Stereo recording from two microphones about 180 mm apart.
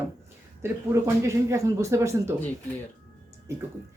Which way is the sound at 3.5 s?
15° right (ahead or behind).